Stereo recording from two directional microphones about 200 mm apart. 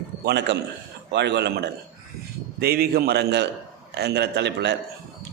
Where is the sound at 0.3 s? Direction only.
60° right (ahead or behind).